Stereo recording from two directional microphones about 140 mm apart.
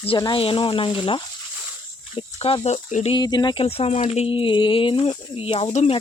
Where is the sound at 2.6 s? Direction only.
55° left (ahead or behind).